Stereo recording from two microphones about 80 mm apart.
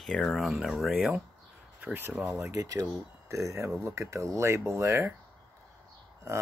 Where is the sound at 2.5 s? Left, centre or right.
Right.